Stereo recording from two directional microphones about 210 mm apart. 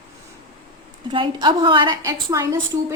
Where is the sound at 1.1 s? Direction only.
20° right (ahead or behind).